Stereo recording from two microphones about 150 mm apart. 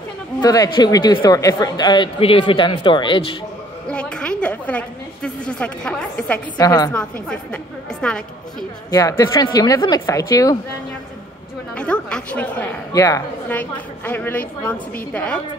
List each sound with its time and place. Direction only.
0.4 s speech: 25° left (ahead or behind)
3.9 s a woman's voice: 5° left (ahead or behind)
6.6 s a woman's voice: 25° left (ahead or behind)
6.9 s a woman's voice: 5° left (ahead or behind)
8.9 s a woman's voice: 25° left (ahead or behind)
11.7 s a woman's voice: 5° left (ahead or behind)
12.9 s a woman's voice: 20° left (ahead or behind)
13.5 s a woman's voice: 10° left (ahead or behind)